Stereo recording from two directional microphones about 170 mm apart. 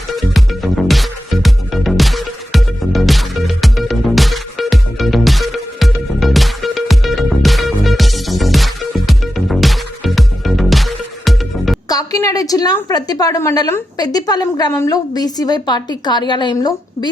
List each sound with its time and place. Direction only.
0.2 s music: centre (ahead or behind)
11.9 s a woman's voice: 20° left (ahead or behind)